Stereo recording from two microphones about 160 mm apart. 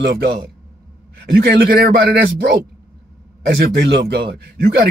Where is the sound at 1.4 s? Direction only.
80° right.